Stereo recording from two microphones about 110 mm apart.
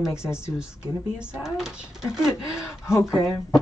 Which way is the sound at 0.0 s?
25° left (ahead or behind).